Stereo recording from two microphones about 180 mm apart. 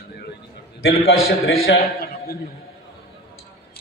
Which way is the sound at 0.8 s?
75° left (ahead or behind).